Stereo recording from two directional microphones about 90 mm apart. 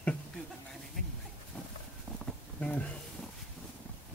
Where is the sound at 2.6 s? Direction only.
15° left (ahead or behind).